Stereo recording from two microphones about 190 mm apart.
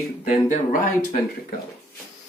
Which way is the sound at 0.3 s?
40° left (ahead or behind).